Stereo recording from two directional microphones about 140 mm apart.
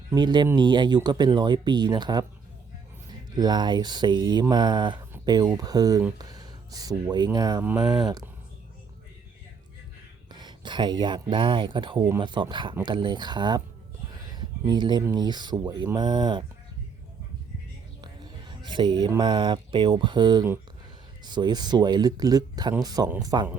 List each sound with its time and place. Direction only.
0.1 s speech: 30° right (ahead or behind)
3.3 s speech: 30° right (ahead or behind)
6.1 s a sound: 30° right (ahead or behind)
7.3 s speech: 25° right (ahead or behind)
7.6 s speech: 10° right (ahead or behind)
10.3 s speech: 30° right (ahead or behind)
14.7 s speech: 30° right (ahead or behind)
18.0 s speech: 35° right (ahead or behind)